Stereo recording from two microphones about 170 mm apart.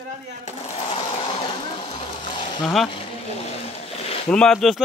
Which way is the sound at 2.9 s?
35° left (ahead or behind).